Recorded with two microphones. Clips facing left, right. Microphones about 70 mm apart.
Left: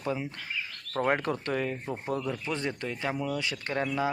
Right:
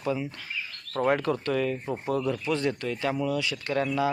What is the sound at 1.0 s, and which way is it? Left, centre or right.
Speech, left.